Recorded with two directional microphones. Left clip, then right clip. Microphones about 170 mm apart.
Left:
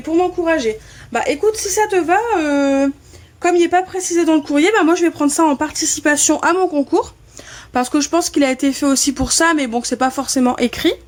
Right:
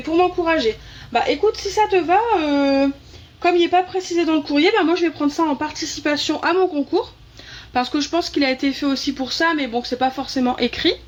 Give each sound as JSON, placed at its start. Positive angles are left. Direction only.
{"t": 0.0, "sound": "speech", "side_deg": 40}
{"t": 1.1, "sound": "speech", "side_deg": 55}